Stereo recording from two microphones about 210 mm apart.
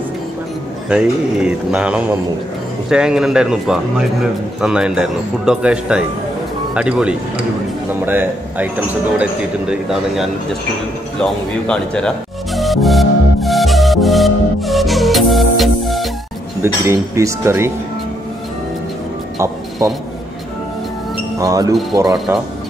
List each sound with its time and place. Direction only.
0.8 s a man's voice: 5° right (ahead or behind)
12.5 s music: centre (ahead or behind)
16.6 s speech: 10° right (ahead or behind)
19.3 s music: 15° right (ahead or behind)
21.4 s speech: 15° right (ahead or behind)